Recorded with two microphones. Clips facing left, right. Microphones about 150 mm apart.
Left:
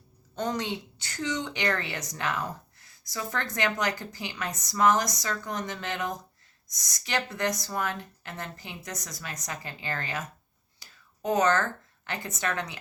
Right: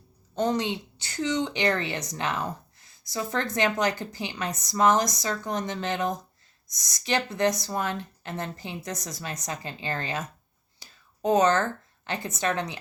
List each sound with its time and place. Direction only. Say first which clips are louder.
0.3 s speech: right 5 dB; 25° right (ahead or behind)